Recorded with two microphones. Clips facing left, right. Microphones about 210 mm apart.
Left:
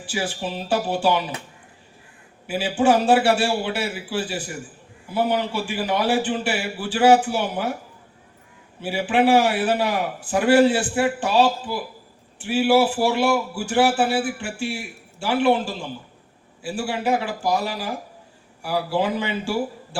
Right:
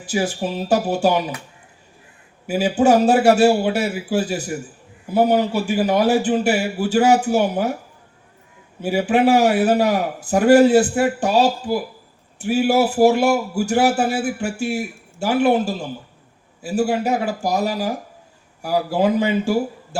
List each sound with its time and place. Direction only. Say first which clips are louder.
0.0 s a man's voice: right 5 dB; 45° right (ahead or behind)
2.5 s a man's voice: right 4 dB; 45° right (ahead or behind)
8.8 s a man's voice: right 3 dB; 45° right (ahead or behind)